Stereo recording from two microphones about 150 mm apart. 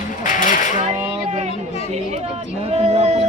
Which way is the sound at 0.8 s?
40° right (ahead or behind).